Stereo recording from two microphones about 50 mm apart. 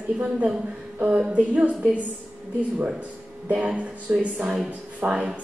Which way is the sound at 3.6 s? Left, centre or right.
Right.